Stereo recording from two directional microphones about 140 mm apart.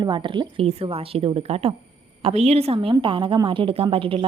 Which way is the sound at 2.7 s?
35° right (ahead or behind).